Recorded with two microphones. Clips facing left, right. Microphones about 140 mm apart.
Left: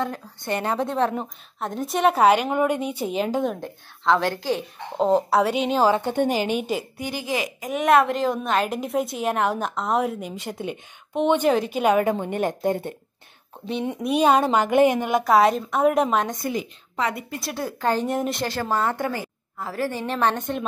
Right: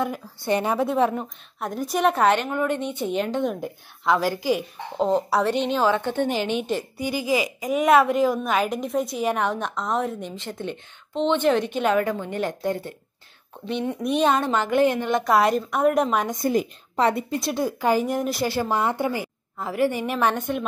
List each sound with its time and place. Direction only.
0.0 s a woman's voice: 10° right (ahead or behind)
3.6 s a woman's voice: 5° right (ahead or behind)
5.8 s a woman's voice: 40° left (ahead or behind)
6.3 s a woman's voice: 10° left (ahead or behind)
14.0 s a woman's voice: 10° left (ahead or behind)
16.4 s a woman's voice: 35° right (ahead or behind)
17.1 s a woman's voice: 25° right (ahead or behind)
18.0 s a woman's voice: centre (ahead or behind)